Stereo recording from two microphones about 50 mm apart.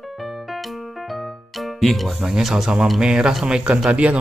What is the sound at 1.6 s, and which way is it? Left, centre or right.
Speech, centre.